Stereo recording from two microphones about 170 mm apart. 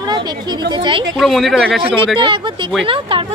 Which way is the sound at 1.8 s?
30° right (ahead or behind).